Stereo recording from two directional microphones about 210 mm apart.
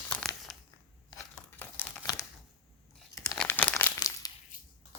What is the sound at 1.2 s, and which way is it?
Crumpling, 10° left (ahead or behind).